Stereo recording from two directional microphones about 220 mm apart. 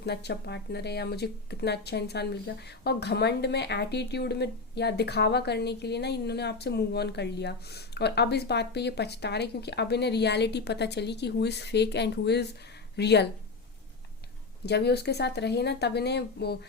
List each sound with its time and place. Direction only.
0.0 s speech: 50° left (ahead or behind)
14.6 s speech: 50° left (ahead or behind)